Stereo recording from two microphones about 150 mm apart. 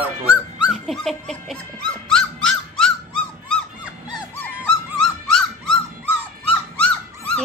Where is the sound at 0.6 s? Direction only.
Centre (ahead or behind).